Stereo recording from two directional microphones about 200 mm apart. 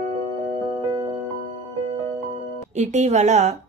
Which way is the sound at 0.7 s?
25° right (ahead or behind).